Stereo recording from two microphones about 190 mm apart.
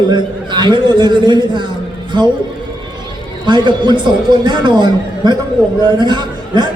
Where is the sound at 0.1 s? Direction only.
25° right (ahead or behind).